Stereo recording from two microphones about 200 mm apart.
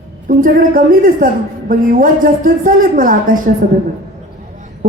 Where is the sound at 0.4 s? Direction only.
45° right (ahead or behind).